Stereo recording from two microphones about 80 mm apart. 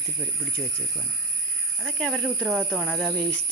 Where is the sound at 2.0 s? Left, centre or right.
Centre.